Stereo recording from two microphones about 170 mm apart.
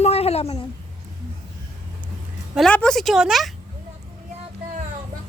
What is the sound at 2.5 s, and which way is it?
Speech, 5° left (ahead or behind).